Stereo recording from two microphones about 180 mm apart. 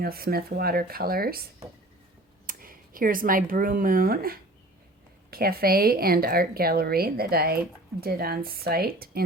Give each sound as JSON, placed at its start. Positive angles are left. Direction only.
{"t": 0.0, "sound": "a woman's voice", "side_deg": -55}
{"t": 1.6, "sound": "speech", "side_deg": -35}
{"t": 2.5, "sound": "a woman's voice", "side_deg": -50}